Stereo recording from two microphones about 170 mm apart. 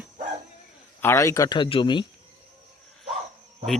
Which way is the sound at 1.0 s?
15° left (ahead or behind).